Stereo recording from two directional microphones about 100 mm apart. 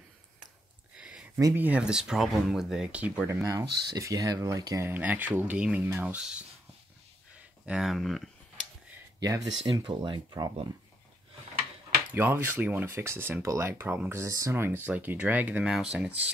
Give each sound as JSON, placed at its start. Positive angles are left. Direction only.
{"t": 0.9, "sound": "a sound", "side_deg": -10}
{"t": 1.5, "sound": "speech", "side_deg": -15}
{"t": 3.4, "sound": "speech", "side_deg": -35}
{"t": 4.8, "sound": "speech", "side_deg": -15}
{"t": 6.1, "sound": "speech", "side_deg": -10}
{"t": 9.2, "sound": "speech", "side_deg": -35}
{"t": 9.7, "sound": "speech", "side_deg": -50}
{"t": 12.1, "sound": "speech", "side_deg": -20}
{"t": 14.2, "sound": "speech", "side_deg": -30}
{"t": 15.7, "sound": "speech", "side_deg": -5}